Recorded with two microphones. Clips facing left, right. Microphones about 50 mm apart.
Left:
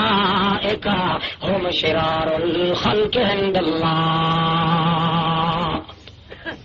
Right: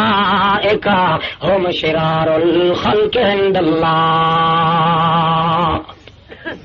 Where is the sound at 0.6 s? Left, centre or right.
Right.